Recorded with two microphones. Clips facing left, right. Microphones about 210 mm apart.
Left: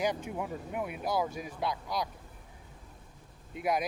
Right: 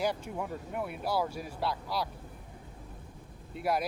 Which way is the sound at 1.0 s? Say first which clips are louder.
Even; 15° left (ahead or behind).